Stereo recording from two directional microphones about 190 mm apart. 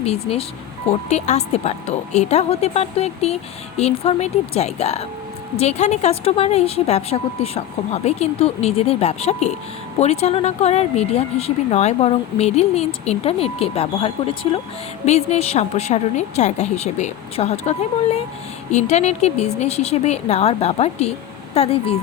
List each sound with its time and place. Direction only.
0.0 s speech: 30° left (ahead or behind)